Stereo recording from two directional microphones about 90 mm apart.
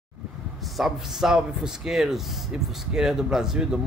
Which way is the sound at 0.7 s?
5° right (ahead or behind).